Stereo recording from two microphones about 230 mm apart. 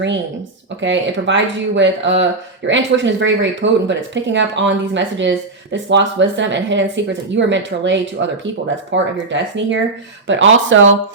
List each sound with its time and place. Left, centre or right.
0.8 s speech: right